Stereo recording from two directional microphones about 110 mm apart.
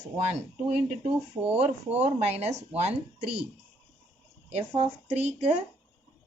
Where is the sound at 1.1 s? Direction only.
15° right (ahead or behind).